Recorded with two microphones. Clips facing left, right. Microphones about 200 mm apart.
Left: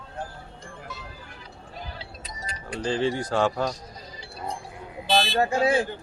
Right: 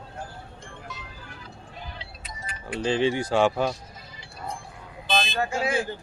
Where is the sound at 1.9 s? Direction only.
40° left (ahead or behind).